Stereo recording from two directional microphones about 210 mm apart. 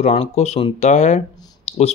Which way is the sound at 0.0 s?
30° left (ahead or behind).